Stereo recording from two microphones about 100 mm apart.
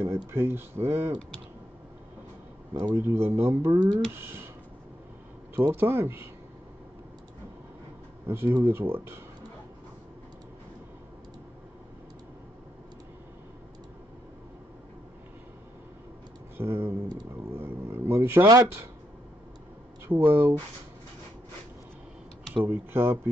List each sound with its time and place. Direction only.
0.0 s speech: 25° right (ahead or behind)
2.7 s speech: 40° right (ahead or behind)
3.0 s speech: 25° right (ahead or behind)
5.6 s speech: 20° right (ahead or behind)
8.3 s speech: 25° right (ahead or behind)
16.5 s speech: 20° right (ahead or behind)
20.1 s speech: 20° right (ahead or behind)
22.7 s speech: 25° right (ahead or behind)